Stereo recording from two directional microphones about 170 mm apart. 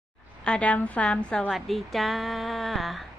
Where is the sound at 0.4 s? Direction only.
5° left (ahead or behind).